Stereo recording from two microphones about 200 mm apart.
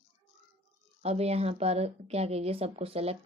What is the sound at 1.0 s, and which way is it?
A woman's voice, 30° right (ahead or behind).